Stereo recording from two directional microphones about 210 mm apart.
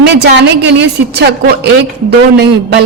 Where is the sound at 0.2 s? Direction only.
55° right (ahead or behind).